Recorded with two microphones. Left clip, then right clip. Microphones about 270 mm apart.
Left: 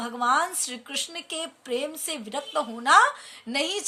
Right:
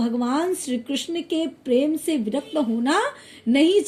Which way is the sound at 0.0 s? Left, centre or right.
Left.